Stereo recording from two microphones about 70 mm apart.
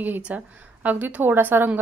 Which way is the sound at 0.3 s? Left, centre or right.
Right.